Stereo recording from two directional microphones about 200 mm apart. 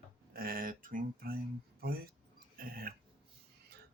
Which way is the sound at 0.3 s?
45° right (ahead or behind).